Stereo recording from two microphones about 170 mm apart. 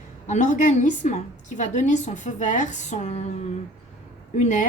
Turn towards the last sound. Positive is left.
turn(degrees=45)  # may be behind; listen again after turning